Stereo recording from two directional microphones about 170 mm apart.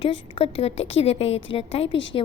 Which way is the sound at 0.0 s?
30° left (ahead or behind).